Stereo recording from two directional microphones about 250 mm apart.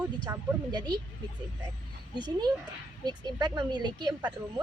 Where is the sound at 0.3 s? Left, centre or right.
Centre.